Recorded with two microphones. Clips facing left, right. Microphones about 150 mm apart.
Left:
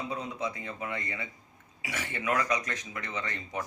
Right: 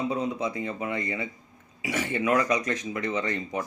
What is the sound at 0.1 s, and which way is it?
Speech, 20° right (ahead or behind).